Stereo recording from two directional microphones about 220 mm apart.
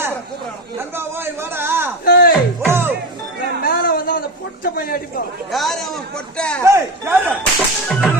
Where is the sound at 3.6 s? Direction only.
40° left (ahead or behind).